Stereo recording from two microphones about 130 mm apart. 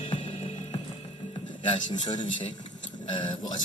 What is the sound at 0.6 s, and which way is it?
Music, 55° left (ahead or behind).